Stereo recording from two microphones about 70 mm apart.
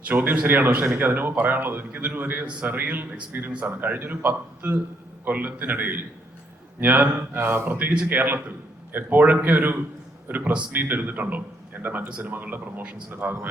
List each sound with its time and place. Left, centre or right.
0.1 s speech: right
7.2 s speech: right
7.7 s speech: right
12.0 s speech: centre